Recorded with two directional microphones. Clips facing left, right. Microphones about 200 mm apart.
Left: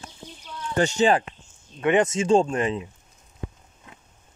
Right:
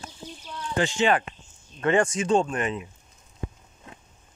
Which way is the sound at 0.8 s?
40° left (ahead or behind).